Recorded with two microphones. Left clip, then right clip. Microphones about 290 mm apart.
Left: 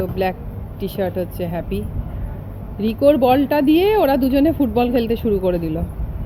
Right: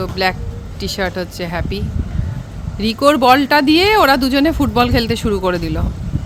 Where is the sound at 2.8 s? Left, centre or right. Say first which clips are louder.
Right 2 dB; centre.